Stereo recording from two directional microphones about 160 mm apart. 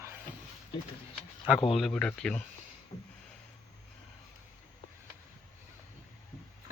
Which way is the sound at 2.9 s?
20° left (ahead or behind).